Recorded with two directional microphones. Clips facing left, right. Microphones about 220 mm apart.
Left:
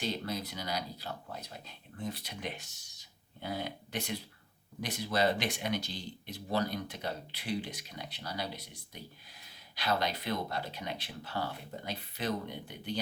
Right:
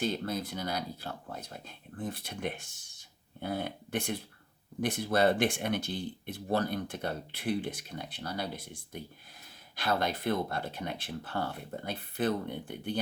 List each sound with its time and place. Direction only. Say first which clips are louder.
0.0 s speech: right 4 dB; 50° right (ahead or behind)